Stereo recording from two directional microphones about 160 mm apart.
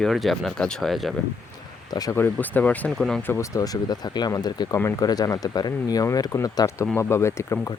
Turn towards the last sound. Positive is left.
turn(degrees=15)  # may be behind; listen again after turning